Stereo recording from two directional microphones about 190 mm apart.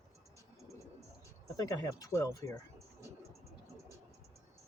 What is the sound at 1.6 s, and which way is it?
Speech, 20° left (ahead or behind).